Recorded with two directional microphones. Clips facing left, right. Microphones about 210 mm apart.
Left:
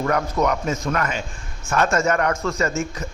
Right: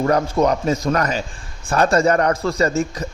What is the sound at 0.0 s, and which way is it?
A man's voice, 30° right (ahead or behind).